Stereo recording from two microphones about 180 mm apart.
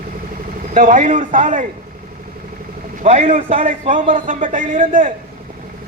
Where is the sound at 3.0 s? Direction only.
35° right (ahead or behind).